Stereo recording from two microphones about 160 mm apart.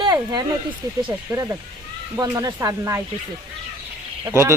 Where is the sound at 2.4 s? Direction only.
20° right (ahead or behind).